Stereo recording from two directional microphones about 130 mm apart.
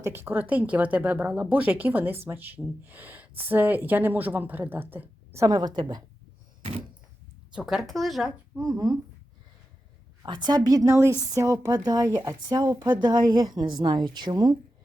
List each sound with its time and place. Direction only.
0.0 s speech: 15° right (ahead or behind); by 6.0 s 35° right (ahead or behind)
7.5 s speech: centre (ahead or behind)
8.7 s speech: 30° right (ahead or behind)
10.2 s a woman's voice: 35° right (ahead or behind)